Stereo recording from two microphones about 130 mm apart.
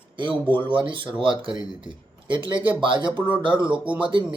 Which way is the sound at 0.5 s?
40° right (ahead or behind).